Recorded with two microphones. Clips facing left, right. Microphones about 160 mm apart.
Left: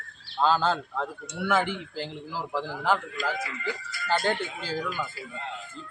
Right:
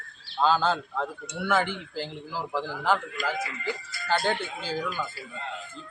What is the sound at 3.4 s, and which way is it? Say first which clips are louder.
Speech: right 1 dB; 30° right (ahead or behind).